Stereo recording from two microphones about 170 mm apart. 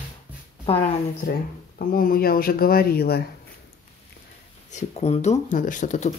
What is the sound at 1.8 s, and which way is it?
Speech, 60° left (ahead or behind).